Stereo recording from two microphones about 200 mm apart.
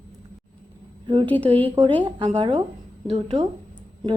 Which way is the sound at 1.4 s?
25° right (ahead or behind).